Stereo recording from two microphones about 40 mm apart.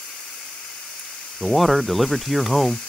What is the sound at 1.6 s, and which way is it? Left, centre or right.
Speech, centre.